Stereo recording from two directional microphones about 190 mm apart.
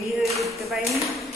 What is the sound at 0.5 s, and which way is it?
Speech, centre (ahead or behind).